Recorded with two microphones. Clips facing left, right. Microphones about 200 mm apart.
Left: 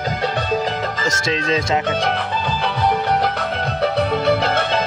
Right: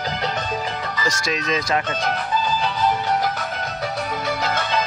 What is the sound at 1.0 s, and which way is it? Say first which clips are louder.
Speech: left 1 dB; 25° left (ahead or behind).